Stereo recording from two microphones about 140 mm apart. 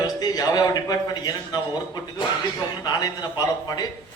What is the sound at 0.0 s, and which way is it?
A man's voice, 30° left (ahead or behind).